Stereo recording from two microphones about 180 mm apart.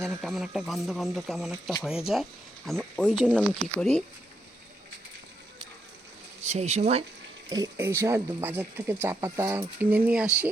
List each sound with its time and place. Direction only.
0.2 s speech: centre (ahead or behind)
6.5 s speech: 40° right (ahead or behind)
7.5 s speech: 20° right (ahead or behind)